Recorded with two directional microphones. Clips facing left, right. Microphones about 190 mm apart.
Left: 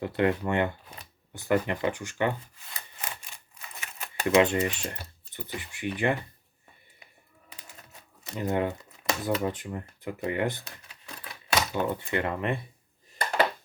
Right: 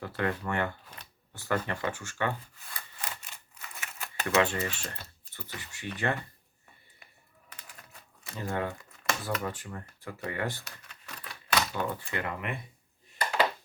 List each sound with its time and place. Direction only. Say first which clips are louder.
0.0 s speech: left 6 dB; 20° left (ahead or behind)
2.7 s sawing: left 1 dB; 20° left (ahead or behind)
4.0 s speech: left 5 dB; 15° left (ahead or behind)
8.2 s shuffling cards: left 5 dB; 20° left (ahead or behind)
9.3 s speech: left 5 dB; 20° left (ahead or behind)
11.2 s typewriter: left 2 dB; 20° left (ahead or behind)